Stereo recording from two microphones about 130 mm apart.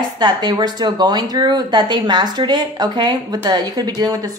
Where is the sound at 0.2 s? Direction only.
35° right (ahead or behind).